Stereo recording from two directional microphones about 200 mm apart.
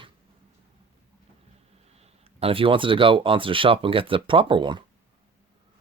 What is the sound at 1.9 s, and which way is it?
Speech, 30° right (ahead or behind).